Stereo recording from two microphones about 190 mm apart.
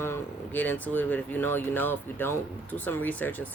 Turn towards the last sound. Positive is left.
turn(degrees=10)  # may be behind; listen again after turning